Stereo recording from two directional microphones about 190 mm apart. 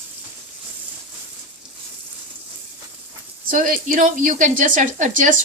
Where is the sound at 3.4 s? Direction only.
45° right (ahead or behind).